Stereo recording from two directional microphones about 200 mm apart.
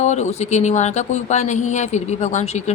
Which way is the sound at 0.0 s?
35° left (ahead or behind).